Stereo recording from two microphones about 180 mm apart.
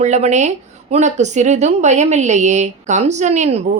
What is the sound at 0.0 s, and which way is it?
Speech, 40° right (ahead or behind).